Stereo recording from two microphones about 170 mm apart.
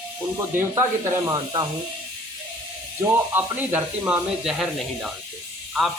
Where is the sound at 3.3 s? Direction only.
10° right (ahead or behind).